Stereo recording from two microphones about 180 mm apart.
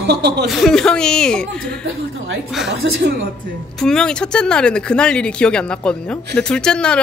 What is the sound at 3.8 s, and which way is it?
Speech, 5° left (ahead or behind).